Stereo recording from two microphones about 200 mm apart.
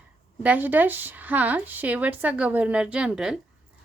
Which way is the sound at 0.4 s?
10° right (ahead or behind).